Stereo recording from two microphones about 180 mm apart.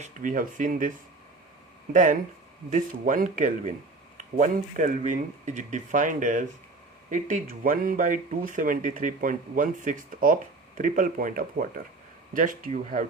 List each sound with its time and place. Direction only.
0.0 s speech: 45° right (ahead or behind)